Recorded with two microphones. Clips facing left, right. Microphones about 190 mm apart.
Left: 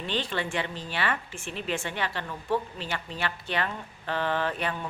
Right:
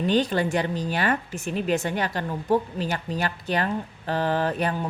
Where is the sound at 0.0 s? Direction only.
40° right (ahead or behind).